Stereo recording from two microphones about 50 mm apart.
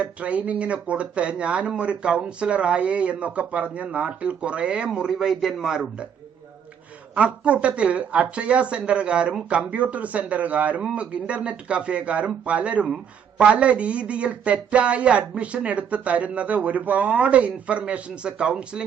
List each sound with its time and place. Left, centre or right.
0.0 s speech: right
5.1 s speech: centre
7.2 s speech: right